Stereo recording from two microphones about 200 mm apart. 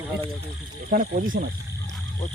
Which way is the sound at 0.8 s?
45° right (ahead or behind).